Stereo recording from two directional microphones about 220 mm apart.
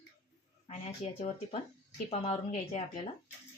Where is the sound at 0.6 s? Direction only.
30° left (ahead or behind).